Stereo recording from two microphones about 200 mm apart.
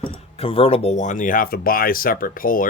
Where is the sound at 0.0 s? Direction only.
25° left (ahead or behind).